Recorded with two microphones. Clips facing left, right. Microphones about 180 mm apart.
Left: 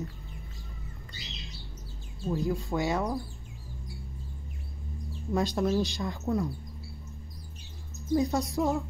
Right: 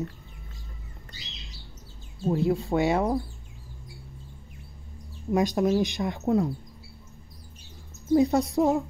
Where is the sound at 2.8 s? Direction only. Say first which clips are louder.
Right 5 dB; 20° right (ahead or behind).